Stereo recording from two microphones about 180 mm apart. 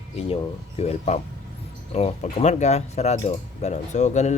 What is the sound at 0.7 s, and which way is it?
Speech, 40° left (ahead or behind).